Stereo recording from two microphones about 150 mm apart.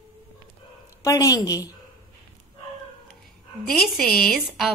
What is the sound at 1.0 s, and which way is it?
Speech, 20° left (ahead or behind).